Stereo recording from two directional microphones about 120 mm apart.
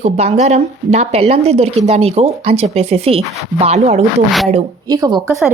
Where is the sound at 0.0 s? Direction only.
70° right (ahead or behind).